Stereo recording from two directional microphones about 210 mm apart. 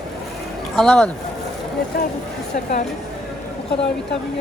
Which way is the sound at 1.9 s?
45° left (ahead or behind).